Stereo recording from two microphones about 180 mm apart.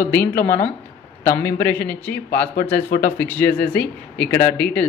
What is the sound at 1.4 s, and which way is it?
Speech, 10° left (ahead or behind).